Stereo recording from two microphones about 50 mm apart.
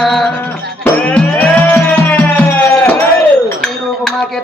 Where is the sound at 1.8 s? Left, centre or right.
Left.